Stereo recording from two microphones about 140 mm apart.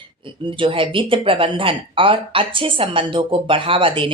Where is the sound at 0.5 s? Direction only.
40° right (ahead or behind).